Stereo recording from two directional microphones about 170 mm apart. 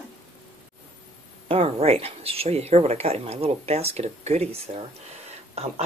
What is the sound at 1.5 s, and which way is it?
Speech, 35° right (ahead or behind).